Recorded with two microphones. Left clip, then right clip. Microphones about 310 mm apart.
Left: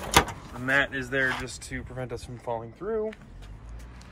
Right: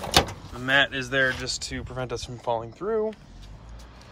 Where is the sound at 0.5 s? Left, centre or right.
Centre.